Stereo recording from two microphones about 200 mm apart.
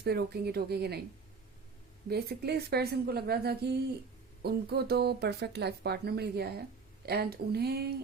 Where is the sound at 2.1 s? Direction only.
55° right (ahead or behind).